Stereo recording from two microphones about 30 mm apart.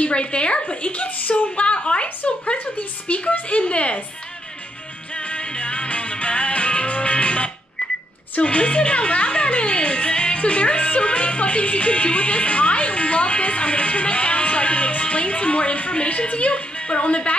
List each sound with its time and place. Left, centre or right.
0.0 s speech: left
1.6 s speech: left
2.5 s speech: left
5.2 s music: left
8.4 s speech: left